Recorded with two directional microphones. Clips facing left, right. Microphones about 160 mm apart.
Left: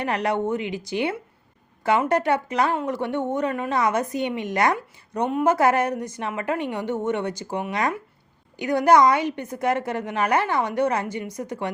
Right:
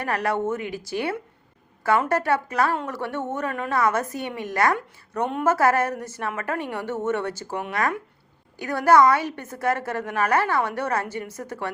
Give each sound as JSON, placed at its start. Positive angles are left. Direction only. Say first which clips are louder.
{"t": 0.0, "sound": "a woman's voice", "louder": "left 1 dB", "side_deg": 20}